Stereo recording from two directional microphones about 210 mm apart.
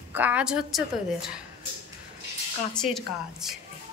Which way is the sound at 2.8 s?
Centre (ahead or behind).